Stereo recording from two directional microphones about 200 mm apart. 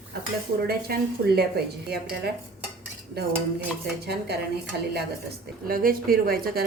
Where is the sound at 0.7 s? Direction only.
50° right (ahead or behind).